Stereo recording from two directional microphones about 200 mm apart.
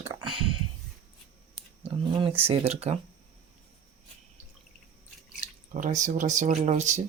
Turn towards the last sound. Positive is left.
turn(degrees=-35)  # may be behind; listen again after turning